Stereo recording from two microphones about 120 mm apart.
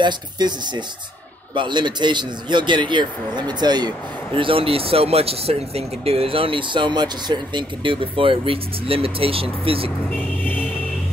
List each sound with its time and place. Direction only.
0.0 s speech: 40° right (ahead or behind)
4.4 s speech: 50° right (ahead or behind)
10.4 s vehicle: 15° left (ahead or behind)